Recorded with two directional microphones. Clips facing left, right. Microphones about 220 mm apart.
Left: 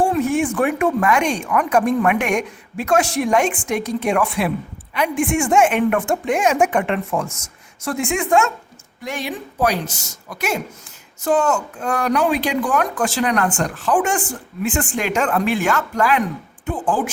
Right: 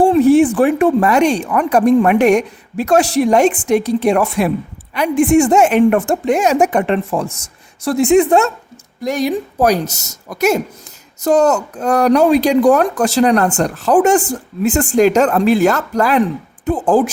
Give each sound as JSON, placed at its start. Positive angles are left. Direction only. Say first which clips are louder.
{"t": 0.0, "sound": "speech", "louder": "right 9 dB", "side_deg": -35}